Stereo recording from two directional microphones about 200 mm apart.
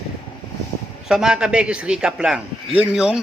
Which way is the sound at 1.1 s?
5° right (ahead or behind).